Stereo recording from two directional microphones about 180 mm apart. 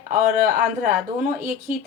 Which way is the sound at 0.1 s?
50° right (ahead or behind).